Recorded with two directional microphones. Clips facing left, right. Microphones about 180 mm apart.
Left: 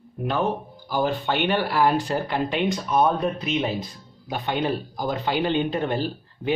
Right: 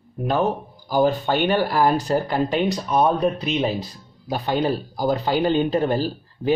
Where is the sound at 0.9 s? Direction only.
45° right (ahead or behind).